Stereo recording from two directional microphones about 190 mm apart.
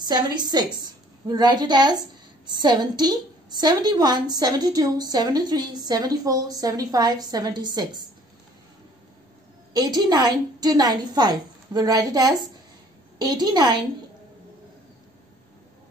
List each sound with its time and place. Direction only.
0.0 s a woman's voice: 20° right (ahead or behind)
9.8 s a woman's voice: 20° right (ahead or behind)